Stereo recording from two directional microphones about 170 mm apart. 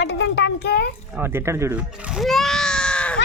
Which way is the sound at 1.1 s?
15° right (ahead or behind).